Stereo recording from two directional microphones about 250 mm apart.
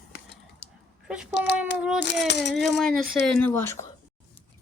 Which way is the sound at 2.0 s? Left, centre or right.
Left.